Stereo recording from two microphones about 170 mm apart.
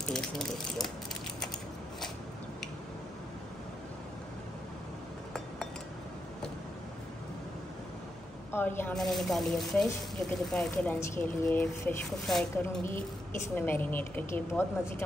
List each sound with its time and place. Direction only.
0.0 s speech: centre (ahead or behind)
8.5 s speech: 10° left (ahead or behind)